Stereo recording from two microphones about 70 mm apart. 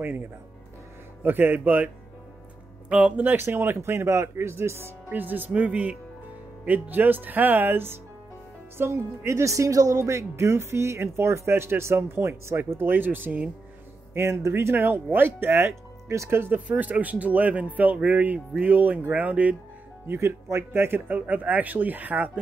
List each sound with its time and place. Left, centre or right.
1.2 s speech: right
2.9 s speech: centre
14.1 s speech: right
16.5 s speech: right
20.1 s speech: right